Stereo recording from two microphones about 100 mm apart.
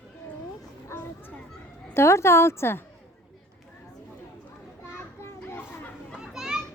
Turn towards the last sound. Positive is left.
turn(degrees=-5)  # may be behind; listen again after turning